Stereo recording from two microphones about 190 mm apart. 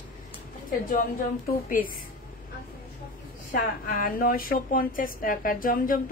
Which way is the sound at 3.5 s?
50° left (ahead or behind).